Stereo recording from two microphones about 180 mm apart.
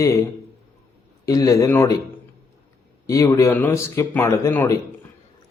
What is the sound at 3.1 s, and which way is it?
A man's voice, 15° left (ahead or behind).